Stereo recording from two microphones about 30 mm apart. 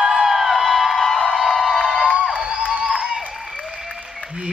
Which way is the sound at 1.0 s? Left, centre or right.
Centre.